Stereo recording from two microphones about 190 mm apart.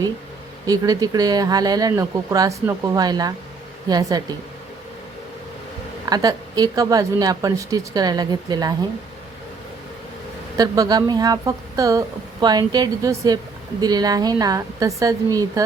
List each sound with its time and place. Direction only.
0.7 s a woman's voice: 20° right (ahead or behind)
6.1 s a woman's voice: 20° right (ahead or behind)
10.6 s a woman's voice: 20° right (ahead or behind)